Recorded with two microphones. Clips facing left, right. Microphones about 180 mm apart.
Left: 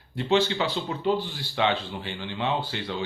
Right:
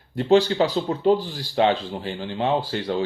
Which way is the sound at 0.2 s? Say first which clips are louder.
Right 6 dB; 40° right (ahead or behind).